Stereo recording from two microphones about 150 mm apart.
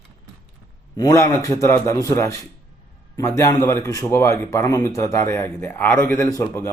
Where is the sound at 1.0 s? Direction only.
25° left (ahead or behind).